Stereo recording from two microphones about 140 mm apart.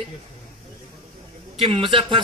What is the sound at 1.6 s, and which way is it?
Speech, 35° right (ahead or behind).